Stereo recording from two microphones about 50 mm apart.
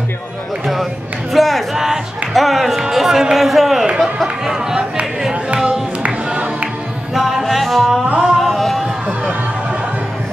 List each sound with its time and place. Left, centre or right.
1.3 s speech: centre
4.0 s a sound: centre
6.0 s music: right
7.2 s music: centre